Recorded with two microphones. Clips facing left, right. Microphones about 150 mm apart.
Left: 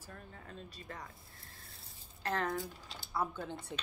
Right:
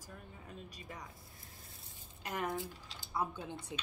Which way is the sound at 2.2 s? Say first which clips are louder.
Left 3 dB; 10° right (ahead or behind).